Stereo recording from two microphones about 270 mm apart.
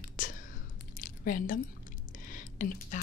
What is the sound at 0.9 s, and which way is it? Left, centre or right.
Squish, left.